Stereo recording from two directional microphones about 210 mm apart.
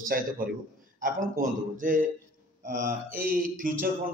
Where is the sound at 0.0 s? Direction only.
40° right (ahead or behind).